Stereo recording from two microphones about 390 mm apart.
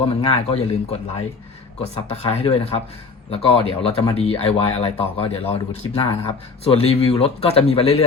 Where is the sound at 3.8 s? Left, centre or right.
Centre.